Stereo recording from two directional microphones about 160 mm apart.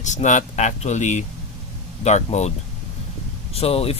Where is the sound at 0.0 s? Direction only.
50° left (ahead or behind).